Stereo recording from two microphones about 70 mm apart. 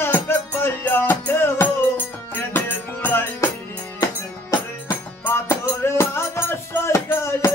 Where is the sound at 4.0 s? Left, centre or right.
Left.